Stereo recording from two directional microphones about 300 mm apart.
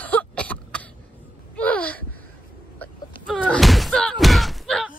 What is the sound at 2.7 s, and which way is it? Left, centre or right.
Slam, centre.